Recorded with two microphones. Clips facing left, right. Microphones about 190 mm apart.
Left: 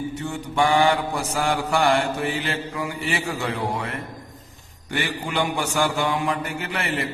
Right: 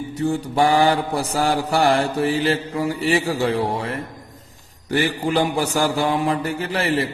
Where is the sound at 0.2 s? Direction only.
35° right (ahead or behind).